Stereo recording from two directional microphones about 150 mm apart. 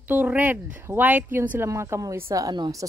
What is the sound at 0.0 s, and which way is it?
A woman's voice, 10° right (ahead or behind).